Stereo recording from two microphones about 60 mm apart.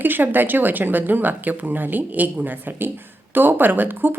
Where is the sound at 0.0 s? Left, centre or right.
Right.